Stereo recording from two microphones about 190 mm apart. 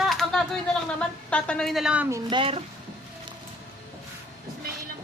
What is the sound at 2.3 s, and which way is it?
Speech, 30° right (ahead or behind).